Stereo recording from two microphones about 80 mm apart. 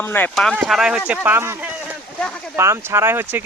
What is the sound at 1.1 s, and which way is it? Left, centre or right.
Speech, right.